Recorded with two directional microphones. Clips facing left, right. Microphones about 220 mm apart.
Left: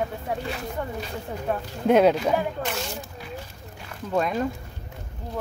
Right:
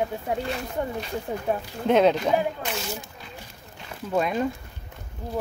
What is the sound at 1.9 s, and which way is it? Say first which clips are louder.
Speech: left 1 dB; 5° left (ahead or behind).